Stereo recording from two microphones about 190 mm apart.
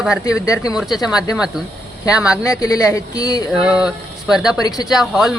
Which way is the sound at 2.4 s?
15° left (ahead or behind).